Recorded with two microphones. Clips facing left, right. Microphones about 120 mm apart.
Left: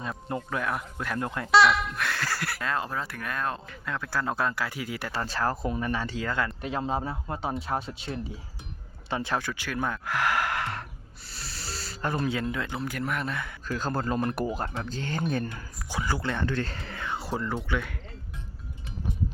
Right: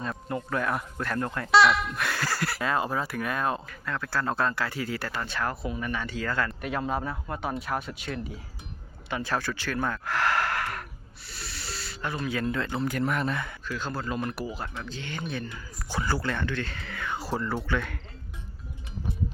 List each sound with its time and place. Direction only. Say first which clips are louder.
0.5 s speech: right 3 dB; centre (ahead or behind)
3.7 s speech: right 1 dB; 15° left (ahead or behind)
5.1 s speech: left 2 dB; 35° left (ahead or behind)
6.2 s speech: even; 20° left (ahead or behind)
11.3 s snake: even; 35° left (ahead or behind)
12.5 s speech: right 3 dB; 10° left (ahead or behind)
13.7 s speech: left 4 dB; 40° left (ahead or behind)
14.3 s speech: left 4 dB; 50° left (ahead or behind)
15.9 s speech: right 1 dB; 15° left (ahead or behind)
16.4 s speech: left 2 dB; 35° left (ahead or behind)
17.4 s speech: right 1 dB; 10° left (ahead or behind)